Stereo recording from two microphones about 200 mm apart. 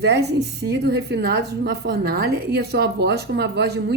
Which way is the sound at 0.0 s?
55° right (ahead or behind).